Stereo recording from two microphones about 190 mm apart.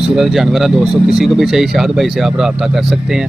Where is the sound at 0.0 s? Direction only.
Centre (ahead or behind).